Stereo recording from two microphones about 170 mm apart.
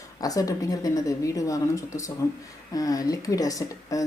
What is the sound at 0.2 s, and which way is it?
Speech, 20° left (ahead or behind).